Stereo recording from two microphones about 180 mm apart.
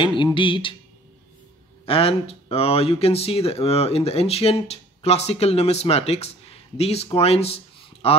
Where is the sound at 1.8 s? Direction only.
30° left (ahead or behind).